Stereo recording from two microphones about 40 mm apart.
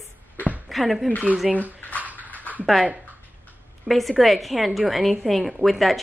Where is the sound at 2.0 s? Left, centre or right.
Right.